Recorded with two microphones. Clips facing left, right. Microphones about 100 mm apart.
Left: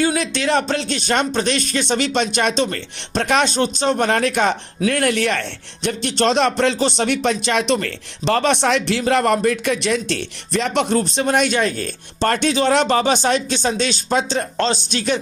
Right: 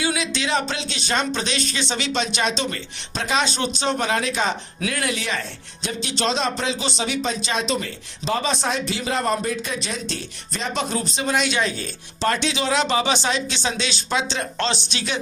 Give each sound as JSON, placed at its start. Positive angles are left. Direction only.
{"t": 0.0, "sound": "speech", "side_deg": 50}